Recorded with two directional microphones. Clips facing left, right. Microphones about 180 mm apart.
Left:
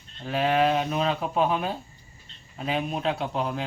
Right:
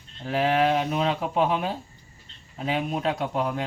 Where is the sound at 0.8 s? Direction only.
20° right (ahead or behind).